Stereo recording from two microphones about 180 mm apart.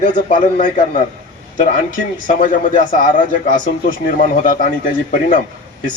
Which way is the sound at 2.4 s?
45° left (ahead or behind).